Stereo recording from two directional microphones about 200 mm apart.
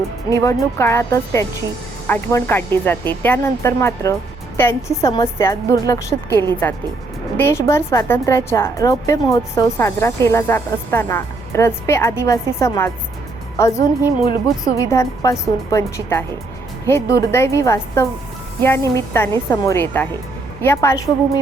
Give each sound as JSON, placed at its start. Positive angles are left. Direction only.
{"t": 0.3, "sound": "a woman's voice", "side_deg": 15}